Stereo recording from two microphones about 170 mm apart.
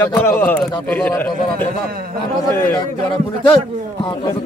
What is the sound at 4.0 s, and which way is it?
Speech, 25° left (ahead or behind).